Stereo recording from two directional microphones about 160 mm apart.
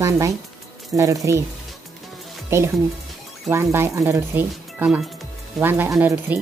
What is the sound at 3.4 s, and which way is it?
Speech, 15° right (ahead or behind).